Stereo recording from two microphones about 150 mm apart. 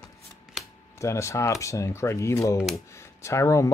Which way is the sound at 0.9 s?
20° left (ahead or behind).